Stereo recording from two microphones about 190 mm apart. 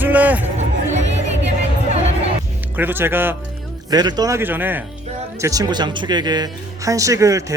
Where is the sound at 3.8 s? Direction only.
20° right (ahead or behind).